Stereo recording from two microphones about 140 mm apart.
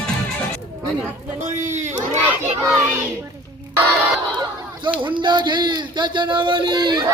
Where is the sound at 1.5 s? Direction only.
60° right (ahead or behind).